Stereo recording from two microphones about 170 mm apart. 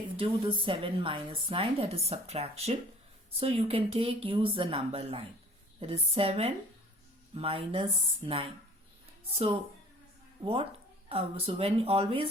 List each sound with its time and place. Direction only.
0.2 s a woman's voice: 30° right (ahead or behind)
10.4 s a woman's voice: 30° right (ahead or behind)